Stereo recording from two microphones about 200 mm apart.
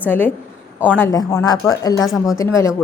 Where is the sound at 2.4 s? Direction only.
15° left (ahead or behind).